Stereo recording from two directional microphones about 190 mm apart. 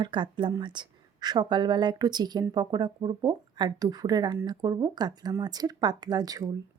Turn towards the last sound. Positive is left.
turn(degrees=-20)  # may be behind; listen again after turning